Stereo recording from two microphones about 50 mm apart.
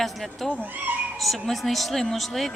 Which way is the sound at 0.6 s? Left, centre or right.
Right.